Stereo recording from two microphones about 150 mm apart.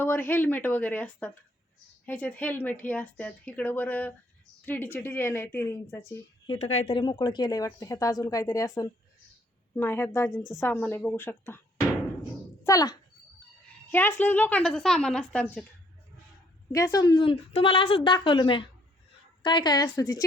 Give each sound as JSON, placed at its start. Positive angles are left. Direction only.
{"t": 0.0, "sound": "speech", "side_deg": 15}
{"t": 6.6, "sound": "speech", "side_deg": 45}
{"t": 10.3, "sound": "a woman's voice", "side_deg": -5}
{"t": 10.6, "sound": "speech", "side_deg": 10}
{"t": 12.6, "sound": "a child's voice", "side_deg": 25}
{"t": 16.7, "sound": "a woman's voice", "side_deg": 20}